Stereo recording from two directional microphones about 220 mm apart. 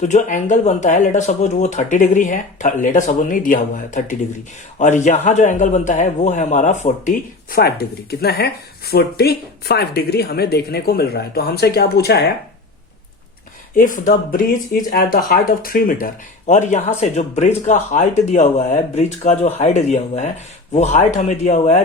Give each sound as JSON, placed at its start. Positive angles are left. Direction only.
{"t": 0.0, "sound": "a woman's voice", "side_deg": 35}
{"t": 13.7, "sound": "speech", "side_deg": 35}